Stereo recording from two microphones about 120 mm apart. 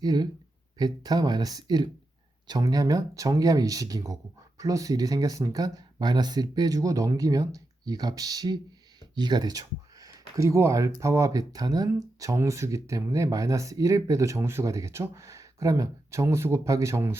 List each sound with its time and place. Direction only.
0.0 s speech: 35° right (ahead or behind)